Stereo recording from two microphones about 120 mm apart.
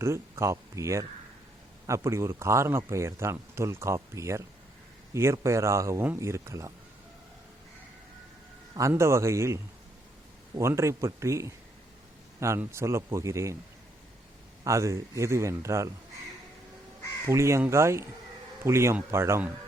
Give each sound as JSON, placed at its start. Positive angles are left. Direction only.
{"t": 0.0, "sound": "speech", "side_deg": -25}
{"t": 8.9, "sound": "speech", "side_deg": -20}
{"t": 10.6, "sound": "speech", "side_deg": -25}
{"t": 14.6, "sound": "speech", "side_deg": -25}
{"t": 17.2, "sound": "speech", "side_deg": -25}